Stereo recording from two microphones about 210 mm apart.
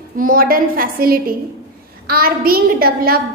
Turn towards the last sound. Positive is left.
turn(degrees=-45)  # may be behind; listen again after turning